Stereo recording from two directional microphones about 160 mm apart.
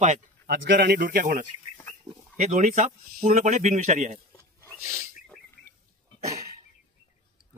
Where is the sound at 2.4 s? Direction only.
45° right (ahead or behind).